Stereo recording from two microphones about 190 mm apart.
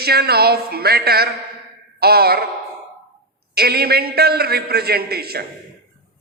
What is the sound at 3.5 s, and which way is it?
A woman's voice, 55° right (ahead or behind).